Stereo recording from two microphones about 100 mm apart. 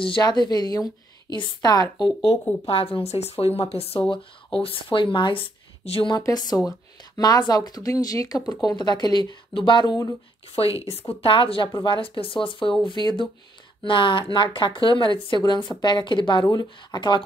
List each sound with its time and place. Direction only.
0.2 s a woman's voice: 45° left (ahead or behind)
2.6 s speech: 70° left (ahead or behind)
4.1 s speech: 65° left (ahead or behind)
6.1 s a woman's voice: 45° left (ahead or behind)
10.5 s a woman's voice: 75° left (ahead or behind); by 17.2 s 45° left (ahead or behind)